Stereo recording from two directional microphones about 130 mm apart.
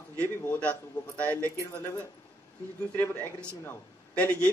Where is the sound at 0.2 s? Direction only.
10° left (ahead or behind).